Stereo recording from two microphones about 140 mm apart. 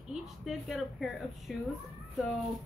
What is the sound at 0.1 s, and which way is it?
A woman's voice, centre (ahead or behind).